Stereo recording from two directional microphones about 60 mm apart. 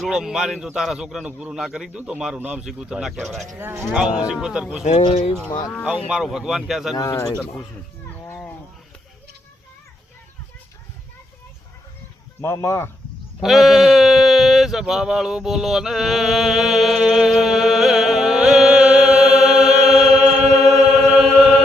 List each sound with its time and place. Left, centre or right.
0.1 s a man's voice: centre
1.9 s a man's voice: centre
3.6 s speech: right
3.9 s a man's voice: centre
5.4 s speech: centre
5.8 s a man's voice: centre
12.4 s speech: left
13.4 s bleat: centre
20.4 s chant: centre